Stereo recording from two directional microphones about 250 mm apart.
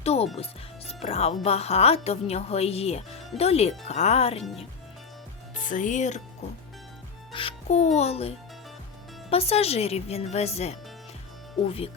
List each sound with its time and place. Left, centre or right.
0.0 s music: left
0.9 s a woman's voice: left
5.5 s speech: left
7.3 s a woman's voice: left
9.3 s a woman's voice: left